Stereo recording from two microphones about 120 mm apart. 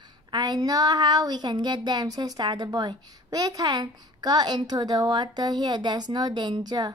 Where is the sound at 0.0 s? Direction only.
35° right (ahead or behind).